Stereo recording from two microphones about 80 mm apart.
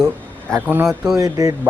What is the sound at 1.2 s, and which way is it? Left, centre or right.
Speech, right.